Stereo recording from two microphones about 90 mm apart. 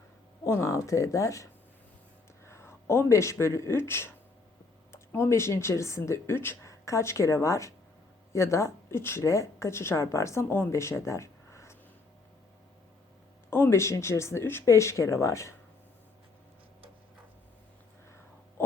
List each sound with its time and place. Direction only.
0.4 s speech: 35° left (ahead or behind)
2.5 s a woman's voice: 30° left (ahead or behind)
13.5 s speech: 30° left (ahead or behind)